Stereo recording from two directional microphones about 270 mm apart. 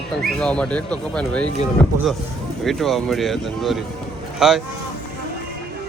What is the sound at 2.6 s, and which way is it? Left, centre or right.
A woman's voice, centre.